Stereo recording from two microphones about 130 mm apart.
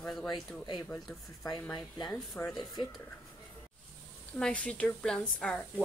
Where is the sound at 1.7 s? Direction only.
30° left (ahead or behind).